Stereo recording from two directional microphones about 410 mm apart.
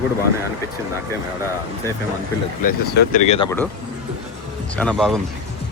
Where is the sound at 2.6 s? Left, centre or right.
Left.